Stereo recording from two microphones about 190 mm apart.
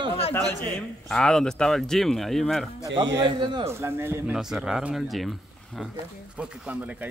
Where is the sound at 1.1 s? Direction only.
5° left (ahead or behind).